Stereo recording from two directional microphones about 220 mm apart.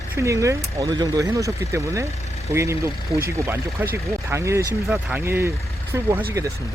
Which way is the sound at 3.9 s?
10° right (ahead or behind).